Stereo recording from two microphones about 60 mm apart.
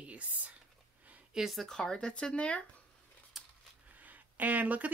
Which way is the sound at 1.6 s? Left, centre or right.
Centre.